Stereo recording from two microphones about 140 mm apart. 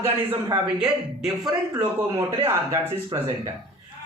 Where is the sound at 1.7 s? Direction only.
25° right (ahead or behind).